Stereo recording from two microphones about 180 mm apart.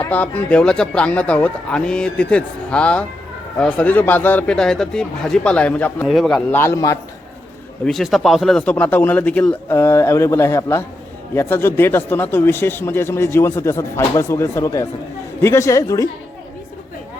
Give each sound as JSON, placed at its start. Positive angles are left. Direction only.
{"t": 0.0, "sound": "speech", "side_deg": 10}
{"t": 7.9, "sound": "speech", "side_deg": 0}